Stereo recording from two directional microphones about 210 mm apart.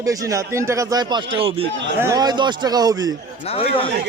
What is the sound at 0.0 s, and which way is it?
A man's voice, 15° right (ahead or behind).